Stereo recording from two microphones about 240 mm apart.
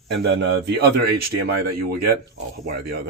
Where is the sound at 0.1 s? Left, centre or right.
Right.